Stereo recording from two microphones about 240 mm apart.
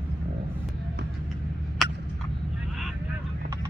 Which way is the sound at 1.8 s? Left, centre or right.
Centre.